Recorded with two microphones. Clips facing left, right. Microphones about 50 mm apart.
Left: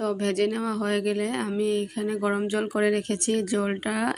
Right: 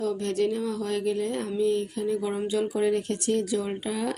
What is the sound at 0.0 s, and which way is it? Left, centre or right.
Speech, left.